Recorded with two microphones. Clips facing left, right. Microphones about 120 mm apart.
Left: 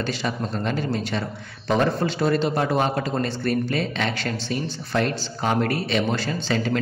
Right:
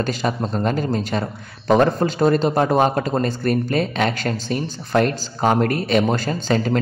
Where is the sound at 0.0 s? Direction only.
45° right (ahead or behind).